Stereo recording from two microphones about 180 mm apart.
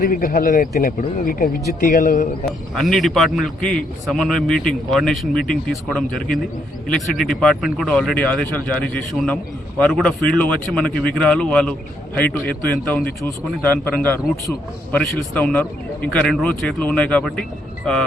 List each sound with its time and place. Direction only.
0.0 s speech: 50° left (ahead or behind)
2.5 s speech: centre (ahead or behind)
13.7 s a man's voice: 10° left (ahead or behind)